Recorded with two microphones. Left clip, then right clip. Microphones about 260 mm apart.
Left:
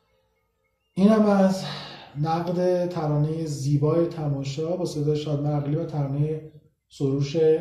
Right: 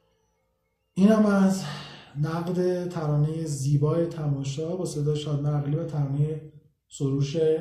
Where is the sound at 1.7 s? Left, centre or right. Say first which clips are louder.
Left 3 dB; right.